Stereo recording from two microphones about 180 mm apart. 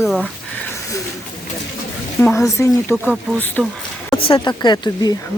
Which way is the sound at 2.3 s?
15° left (ahead or behind).